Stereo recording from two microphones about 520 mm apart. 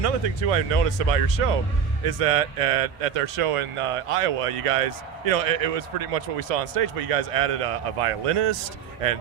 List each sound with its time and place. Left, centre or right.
0.0 s speech: right